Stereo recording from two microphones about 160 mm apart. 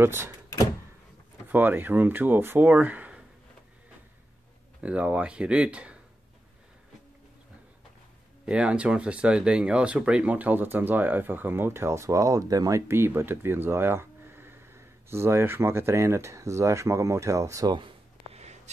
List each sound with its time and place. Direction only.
0.0 s speech: 15° right (ahead or behind)
1.5 s speech: 10° right (ahead or behind)
4.8 s speech: 10° right (ahead or behind)
8.5 s speech: 5° right (ahead or behind)
17.7 s a sound: 35° right (ahead or behind)